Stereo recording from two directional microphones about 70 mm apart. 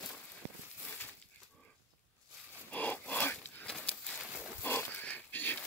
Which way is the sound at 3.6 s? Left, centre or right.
Centre.